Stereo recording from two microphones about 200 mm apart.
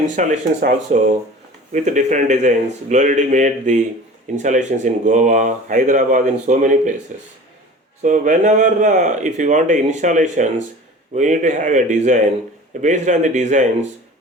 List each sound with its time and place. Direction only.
0.2 s speech: 40° right (ahead or behind)
8.0 s speech: 40° right (ahead or behind)